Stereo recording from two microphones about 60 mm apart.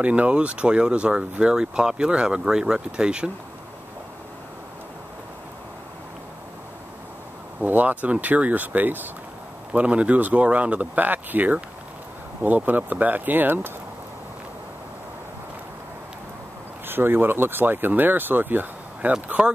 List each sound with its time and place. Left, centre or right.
0.0 s speech: right
7.6 s speech: right
16.8 s speech: right; by 19.5 s centre